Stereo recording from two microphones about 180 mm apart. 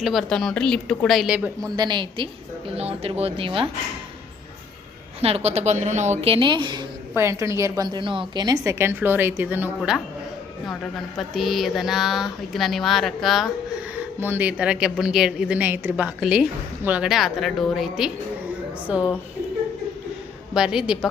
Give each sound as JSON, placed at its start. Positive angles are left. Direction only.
{"t": 0.0, "sound": "a woman's voice", "side_deg": 0}
{"t": 1.7, "sound": "a woman's voice", "side_deg": -25}
{"t": 5.2, "sound": "a woman's voice", "side_deg": -35}
{"t": 7.1, "sound": "a woman's voice", "side_deg": -15}
{"t": 11.2, "sound": "a woman's voice", "side_deg": 0}
{"t": 14.2, "sound": "a woman's voice", "side_deg": -10}
{"t": 20.5, "sound": "a woman's voice", "side_deg": -5}